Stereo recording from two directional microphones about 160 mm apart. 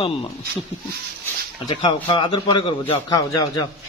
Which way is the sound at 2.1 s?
30° left (ahead or behind).